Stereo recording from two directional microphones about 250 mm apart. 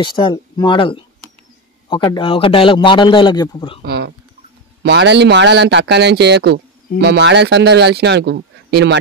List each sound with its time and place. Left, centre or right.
0.0 s a man's voice: centre
3.8 s a sound: right
4.8 s a man's voice: right